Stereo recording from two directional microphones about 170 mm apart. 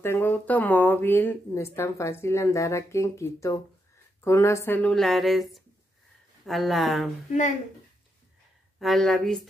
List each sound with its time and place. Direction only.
0.0 s speech: 15° left (ahead or behind)
8.7 s speech: centre (ahead or behind)